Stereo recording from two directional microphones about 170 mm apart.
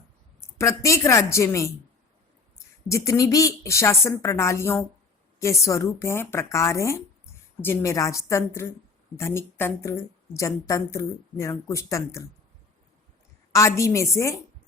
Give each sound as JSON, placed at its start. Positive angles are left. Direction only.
{"t": 0.6, "sound": "a woman's voice", "side_deg": 20}
{"t": 2.9, "sound": "a woman's voice", "side_deg": 20}
{"t": 13.5, "sound": "a woman's voice", "side_deg": 20}